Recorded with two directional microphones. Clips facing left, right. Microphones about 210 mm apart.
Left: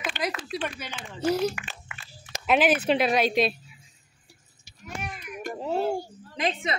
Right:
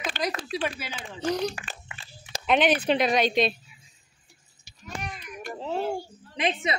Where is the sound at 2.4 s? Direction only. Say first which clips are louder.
Even; 5° left (ahead or behind).